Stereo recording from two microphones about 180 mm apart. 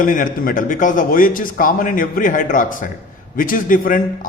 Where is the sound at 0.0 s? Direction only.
50° left (ahead or behind).